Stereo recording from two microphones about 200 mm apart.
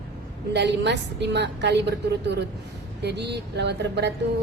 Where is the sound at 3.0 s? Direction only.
55° right (ahead or behind).